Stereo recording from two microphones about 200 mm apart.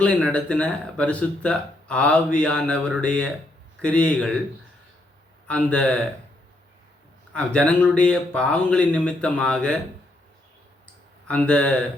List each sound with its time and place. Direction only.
0.3 s speech: 5° left (ahead or behind)
5.5 s speech: 5° left (ahead or behind)
7.3 s speech: 5° left (ahead or behind)
11.3 s speech: 5° left (ahead or behind)